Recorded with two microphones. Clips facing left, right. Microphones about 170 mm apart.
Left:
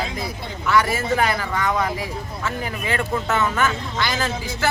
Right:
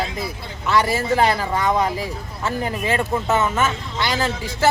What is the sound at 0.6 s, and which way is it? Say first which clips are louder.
Speech: right 1 dB; 25° right (ahead or behind).